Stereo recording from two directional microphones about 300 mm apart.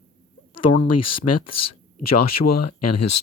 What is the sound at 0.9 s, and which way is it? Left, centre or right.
Speech, left.